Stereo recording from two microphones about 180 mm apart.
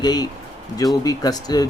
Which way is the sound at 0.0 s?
20° left (ahead or behind).